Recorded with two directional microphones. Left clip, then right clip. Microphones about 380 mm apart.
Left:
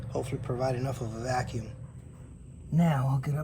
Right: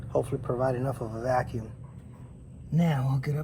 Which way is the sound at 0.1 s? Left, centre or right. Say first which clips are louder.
Right 6 dB; centre.